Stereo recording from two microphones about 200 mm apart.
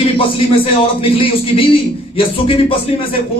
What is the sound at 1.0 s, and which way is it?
A man's voice, 25° left (ahead or behind).